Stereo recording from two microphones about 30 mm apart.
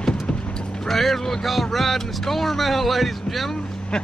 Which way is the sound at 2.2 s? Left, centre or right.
Centre.